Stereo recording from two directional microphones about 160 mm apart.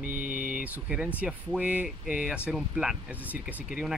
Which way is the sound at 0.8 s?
10° right (ahead or behind).